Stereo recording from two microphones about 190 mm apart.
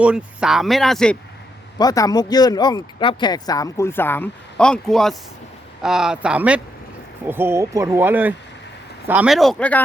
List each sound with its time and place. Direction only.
0.0 s speech: 5° right (ahead or behind)
1.8 s speech: 20° left (ahead or behind)